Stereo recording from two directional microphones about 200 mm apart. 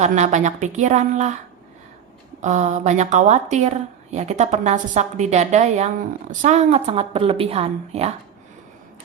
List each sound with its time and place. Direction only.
0.0 s speech: 35° right (ahead or behind)
2.4 s speech: 35° right (ahead or behind)